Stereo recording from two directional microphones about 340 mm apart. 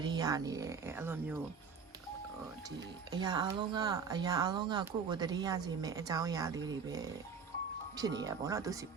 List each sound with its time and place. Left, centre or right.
0.0 s speech: centre
2.6 s speech: centre